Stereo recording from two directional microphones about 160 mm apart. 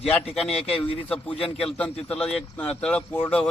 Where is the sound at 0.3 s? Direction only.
Centre (ahead or behind).